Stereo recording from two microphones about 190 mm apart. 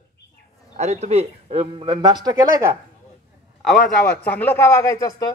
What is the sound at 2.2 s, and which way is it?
Speech, 15° right (ahead or behind).